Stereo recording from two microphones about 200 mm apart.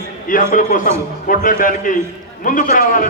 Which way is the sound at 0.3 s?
40° left (ahead or behind).